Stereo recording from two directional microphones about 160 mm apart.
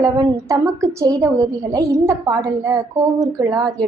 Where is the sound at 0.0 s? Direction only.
20° right (ahead or behind).